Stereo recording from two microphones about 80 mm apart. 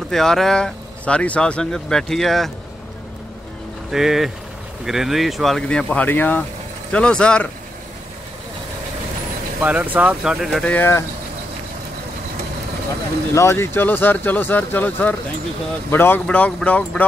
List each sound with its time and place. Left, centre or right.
0.1 s speech: centre
3.9 s speech: centre
5.7 s speech: centre
6.9 s speech: centre
9.6 s speech: centre
10.2 s speech: centre
10.6 s speech: centre
13.3 s speech: left
16.3 s speech: centre